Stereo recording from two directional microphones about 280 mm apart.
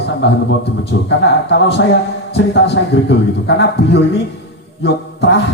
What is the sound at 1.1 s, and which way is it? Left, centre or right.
Speech, left.